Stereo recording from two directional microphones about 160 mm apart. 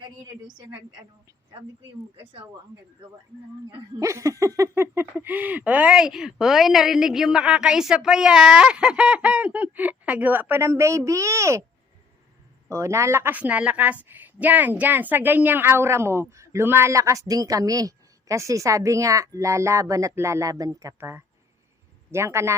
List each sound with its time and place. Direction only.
0.0 s a woman's voice: 30° right (ahead or behind)
4.0 s speech: 20° right (ahead or behind)
12.6 s a woman's voice: 20° right (ahead or behind)